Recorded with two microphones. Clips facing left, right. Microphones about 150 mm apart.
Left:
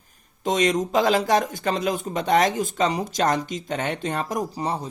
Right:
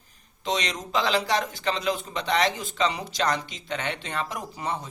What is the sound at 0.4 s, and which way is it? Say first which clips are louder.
Speech: left 8 dB; 45° left (ahead or behind).